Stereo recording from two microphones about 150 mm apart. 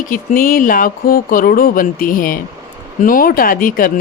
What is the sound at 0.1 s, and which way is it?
A woman's voice, 65° left (ahead or behind).